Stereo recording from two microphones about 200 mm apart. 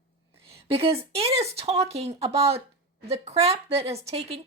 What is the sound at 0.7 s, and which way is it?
A woman's voice, 30° right (ahead or behind).